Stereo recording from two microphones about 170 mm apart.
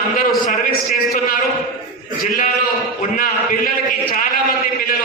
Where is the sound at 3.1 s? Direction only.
55° left (ahead or behind).